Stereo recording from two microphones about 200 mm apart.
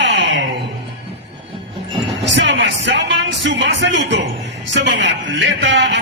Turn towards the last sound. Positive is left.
turn(degrees=-65)  # may be behind; listen again after turning